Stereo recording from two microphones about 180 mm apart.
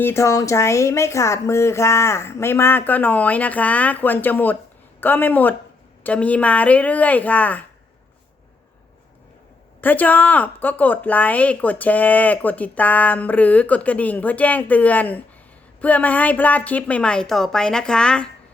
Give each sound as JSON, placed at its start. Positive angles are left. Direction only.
{"t": 0.0, "sound": "a woman's voice", "side_deg": 15}
{"t": 9.8, "sound": "a woman's voice", "side_deg": 10}